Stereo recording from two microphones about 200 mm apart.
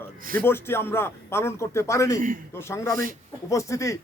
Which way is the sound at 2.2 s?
40° right (ahead or behind).